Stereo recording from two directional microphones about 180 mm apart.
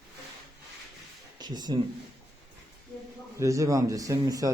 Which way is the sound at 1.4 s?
25° right (ahead or behind).